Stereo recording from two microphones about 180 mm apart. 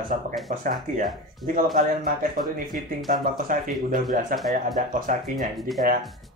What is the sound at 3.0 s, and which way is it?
Speech, 50° right (ahead or behind).